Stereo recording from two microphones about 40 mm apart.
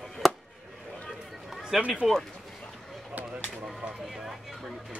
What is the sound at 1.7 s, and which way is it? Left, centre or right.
Speech, centre.